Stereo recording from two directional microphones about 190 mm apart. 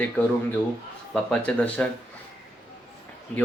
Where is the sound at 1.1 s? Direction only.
5° left (ahead or behind).